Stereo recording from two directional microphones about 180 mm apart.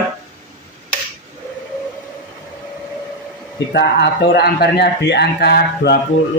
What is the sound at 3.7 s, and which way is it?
A man's voice, 70° left (ahead or behind).